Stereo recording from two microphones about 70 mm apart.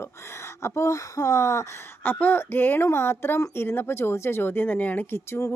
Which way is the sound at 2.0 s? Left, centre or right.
Left.